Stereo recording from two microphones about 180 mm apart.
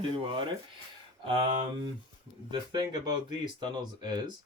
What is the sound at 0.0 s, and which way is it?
Speech, 30° right (ahead or behind).